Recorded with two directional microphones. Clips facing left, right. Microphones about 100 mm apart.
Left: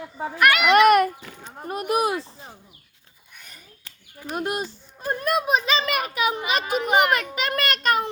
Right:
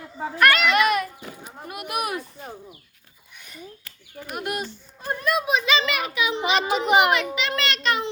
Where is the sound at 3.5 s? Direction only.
30° left (ahead or behind).